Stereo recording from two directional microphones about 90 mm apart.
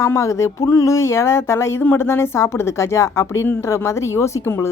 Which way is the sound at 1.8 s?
25° left (ahead or behind).